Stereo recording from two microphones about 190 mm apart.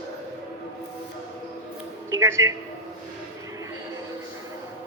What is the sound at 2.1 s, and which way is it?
Speech, 15° right (ahead or behind).